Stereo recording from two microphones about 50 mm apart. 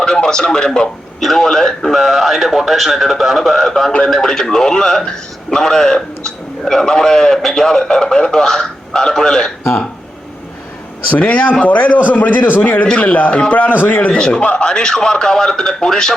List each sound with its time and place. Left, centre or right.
0.0 s a man's voice: centre
1.2 s a man's voice: centre
11.1 s a man's voice: left
13.0 s a man's voice: left
14.1 s a man's voice: centre